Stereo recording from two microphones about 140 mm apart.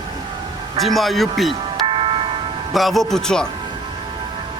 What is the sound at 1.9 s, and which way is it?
Music, 40° right (ahead or behind).